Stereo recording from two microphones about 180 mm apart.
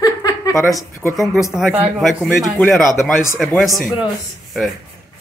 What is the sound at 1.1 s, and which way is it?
Speech, centre (ahead or behind).